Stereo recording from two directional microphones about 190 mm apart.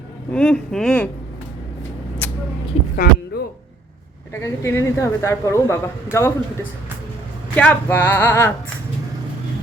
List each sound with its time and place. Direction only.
0.3 s speech: 5° left (ahead or behind)
2.2 s vehicle: 10° left (ahead or behind)
2.9 s speech: 55° left (ahead or behind)
4.4 s a woman's voice: 15° left (ahead or behind)